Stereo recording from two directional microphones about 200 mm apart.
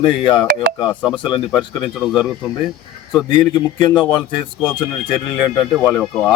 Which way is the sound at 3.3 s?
20° left (ahead or behind).